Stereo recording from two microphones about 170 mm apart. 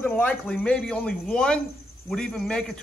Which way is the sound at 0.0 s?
10° left (ahead or behind).